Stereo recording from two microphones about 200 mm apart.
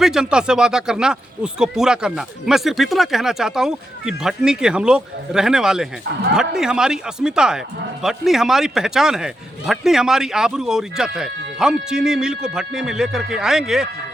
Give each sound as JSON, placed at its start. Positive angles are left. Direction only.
{"t": 0.0, "sound": "speech", "side_deg": -5}